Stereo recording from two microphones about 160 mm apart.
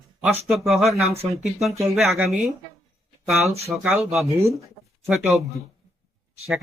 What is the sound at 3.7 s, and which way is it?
Speech, 5° right (ahead or behind).